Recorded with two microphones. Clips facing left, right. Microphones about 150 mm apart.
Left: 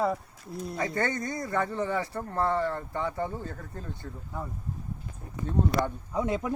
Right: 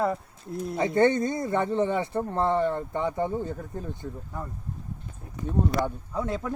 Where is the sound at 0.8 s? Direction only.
25° right (ahead or behind).